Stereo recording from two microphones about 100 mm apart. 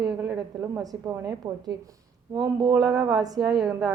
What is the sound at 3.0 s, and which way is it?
Speech, 40° right (ahead or behind).